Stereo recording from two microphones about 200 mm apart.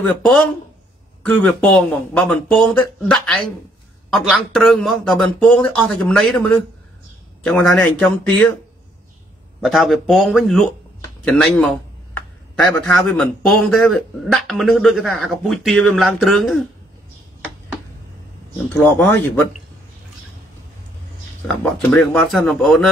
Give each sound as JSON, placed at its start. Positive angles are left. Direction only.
{"t": 1.2, "sound": "a man's voice", "side_deg": 5}
{"t": 7.4, "sound": "speech", "side_deg": 0}
{"t": 9.6, "sound": "a man's voice", "side_deg": 0}
{"t": 18.8, "sound": "speech", "side_deg": 10}
{"t": 21.6, "sound": "a man's voice", "side_deg": 5}